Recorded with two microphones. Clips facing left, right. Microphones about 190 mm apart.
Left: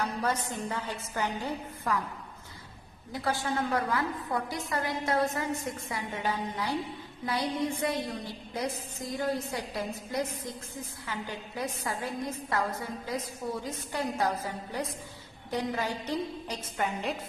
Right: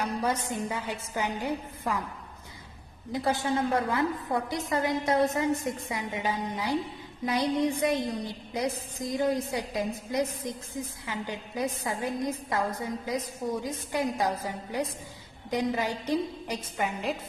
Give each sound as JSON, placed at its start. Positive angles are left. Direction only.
{"t": 0.0, "sound": "a woman's voice", "side_deg": -15}
{"t": 3.1, "sound": "a woman's voice", "side_deg": -20}
{"t": 11.1, "sound": "a woman's voice", "side_deg": -15}